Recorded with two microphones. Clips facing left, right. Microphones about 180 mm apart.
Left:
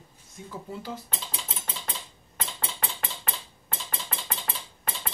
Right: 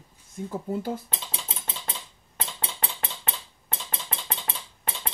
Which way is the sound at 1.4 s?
20° right (ahead or behind).